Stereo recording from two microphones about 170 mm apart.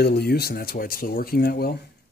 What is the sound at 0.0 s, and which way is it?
Speech, 75° left (ahead or behind).